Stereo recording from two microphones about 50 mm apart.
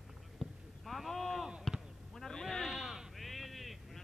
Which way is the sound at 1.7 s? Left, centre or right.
Centre.